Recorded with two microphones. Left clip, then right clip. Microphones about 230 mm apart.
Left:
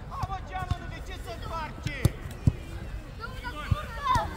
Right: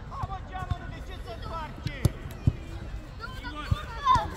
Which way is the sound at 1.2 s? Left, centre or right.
Left.